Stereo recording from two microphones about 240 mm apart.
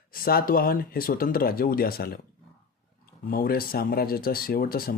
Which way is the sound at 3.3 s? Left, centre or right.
Left.